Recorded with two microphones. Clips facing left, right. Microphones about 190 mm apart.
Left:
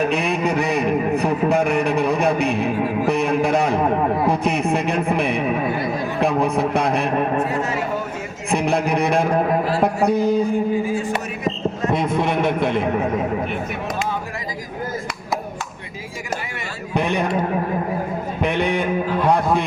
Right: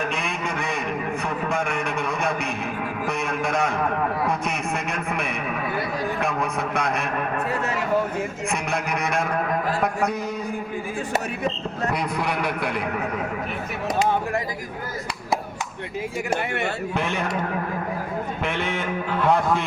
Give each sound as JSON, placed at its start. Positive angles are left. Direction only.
{"t": 0.0, "sound": "a man's voice", "side_deg": 35}
{"t": 8.4, "sound": "a man's voice", "side_deg": 30}
{"t": 10.8, "sound": "speech", "side_deg": -55}
{"t": 11.9, "sound": "a man's voice", "side_deg": 25}
{"t": 16.9, "sound": "a man's voice", "side_deg": 15}
{"t": 18.4, "sound": "a sound", "side_deg": 15}